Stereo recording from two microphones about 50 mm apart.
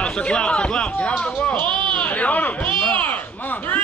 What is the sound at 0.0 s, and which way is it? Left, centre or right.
Speech, left.